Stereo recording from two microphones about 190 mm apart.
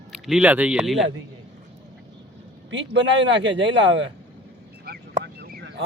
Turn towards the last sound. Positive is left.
turn(degrees=-55)  # may be behind; listen again after turning